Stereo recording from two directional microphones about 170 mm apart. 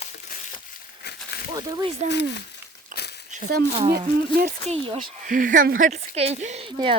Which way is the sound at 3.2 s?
45° right (ahead or behind).